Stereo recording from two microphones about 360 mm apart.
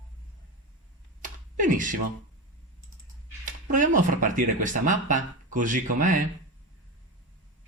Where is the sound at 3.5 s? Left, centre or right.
Right.